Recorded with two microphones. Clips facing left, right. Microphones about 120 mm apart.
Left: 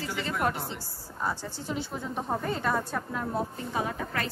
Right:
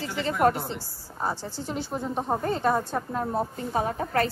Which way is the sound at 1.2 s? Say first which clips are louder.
Right 3 dB; 30° right (ahead or behind).